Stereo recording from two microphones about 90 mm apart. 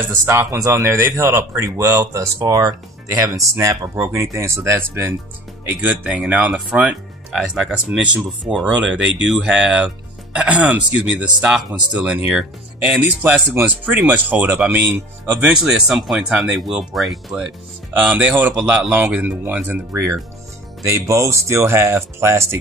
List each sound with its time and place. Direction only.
0.1 s speech: 30° right (ahead or behind); by 13.0 s 10° right (ahead or behind)
13.0 s speech: 20° right (ahead or behind)
15.4 s speech: 5° right (ahead or behind)
17.9 s speech: 20° right (ahead or behind)